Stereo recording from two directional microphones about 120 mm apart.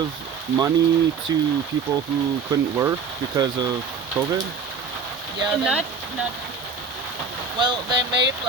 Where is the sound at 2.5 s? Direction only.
25° right (ahead or behind).